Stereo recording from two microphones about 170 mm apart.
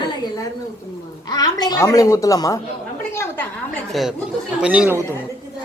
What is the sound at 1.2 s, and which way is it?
Speech, 25° left (ahead or behind).